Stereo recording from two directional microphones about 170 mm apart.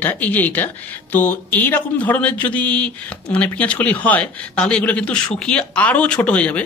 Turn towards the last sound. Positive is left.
turn(degrees=10)  # may be behind; listen again after turning